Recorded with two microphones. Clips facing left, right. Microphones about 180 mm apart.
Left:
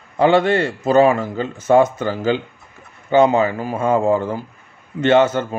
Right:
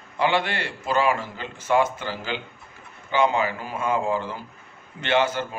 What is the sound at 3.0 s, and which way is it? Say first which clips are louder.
Speech: left 8 dB; 40° left (ahead or behind).